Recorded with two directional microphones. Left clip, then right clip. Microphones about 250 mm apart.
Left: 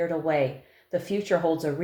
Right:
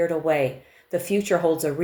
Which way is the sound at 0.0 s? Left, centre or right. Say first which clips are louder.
Right 3 dB; right.